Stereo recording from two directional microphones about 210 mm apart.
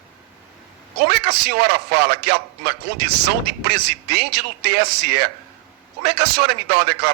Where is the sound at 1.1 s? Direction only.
50° right (ahead or behind).